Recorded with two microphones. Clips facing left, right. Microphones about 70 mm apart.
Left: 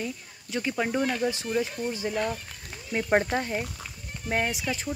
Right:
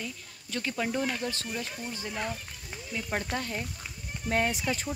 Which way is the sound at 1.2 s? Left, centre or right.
Centre.